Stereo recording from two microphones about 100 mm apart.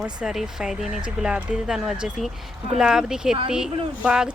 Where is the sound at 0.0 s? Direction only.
5° right (ahead or behind).